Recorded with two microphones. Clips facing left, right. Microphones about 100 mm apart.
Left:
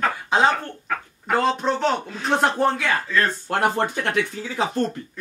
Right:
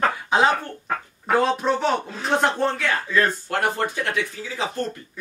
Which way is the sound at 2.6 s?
15° left (ahead or behind).